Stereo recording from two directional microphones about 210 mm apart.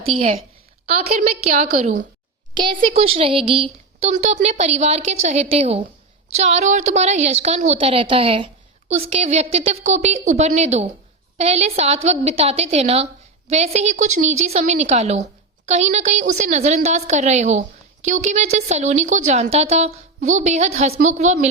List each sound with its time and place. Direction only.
1.1 s a woman's voice: 30° right (ahead or behind)